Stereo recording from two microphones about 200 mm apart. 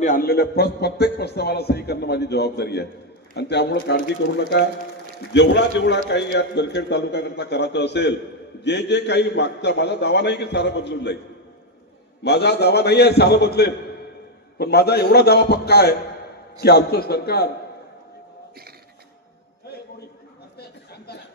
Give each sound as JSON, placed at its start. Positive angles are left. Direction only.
{"t": 0.0, "sound": "a man's voice", "side_deg": 45}
{"t": 12.2, "sound": "a man's voice", "side_deg": 55}